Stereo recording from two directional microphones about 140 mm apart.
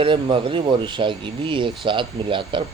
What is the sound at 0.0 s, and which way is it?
Speech, 35° right (ahead or behind).